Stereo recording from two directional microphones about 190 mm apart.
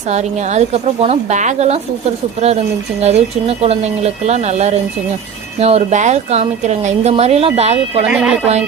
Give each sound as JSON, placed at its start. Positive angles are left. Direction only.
{"t": 0.1, "sound": "speech", "side_deg": -35}
{"t": 3.0, "sound": "speech", "side_deg": -35}
{"t": 8.0, "sound": "speech", "side_deg": -5}